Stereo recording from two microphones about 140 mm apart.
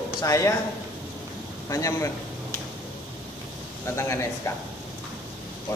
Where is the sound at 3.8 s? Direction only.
20° left (ahead or behind).